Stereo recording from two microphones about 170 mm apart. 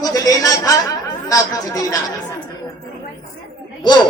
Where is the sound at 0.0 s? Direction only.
20° left (ahead or behind).